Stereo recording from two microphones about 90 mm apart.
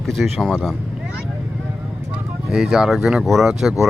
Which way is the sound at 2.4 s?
5° right (ahead or behind).